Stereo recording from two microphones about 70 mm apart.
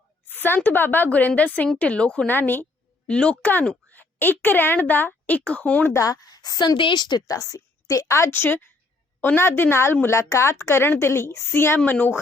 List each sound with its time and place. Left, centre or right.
0.3 s a woman's voice: left
3.1 s a woman's voice: centre
5.9 s a woman's voice: left
8.3 s a woman's voice: left
10.1 s a woman's voice: left
11.9 s a woman's voice: left